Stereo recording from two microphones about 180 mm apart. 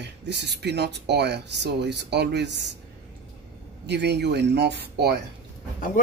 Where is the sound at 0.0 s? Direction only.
70° right (ahead or behind).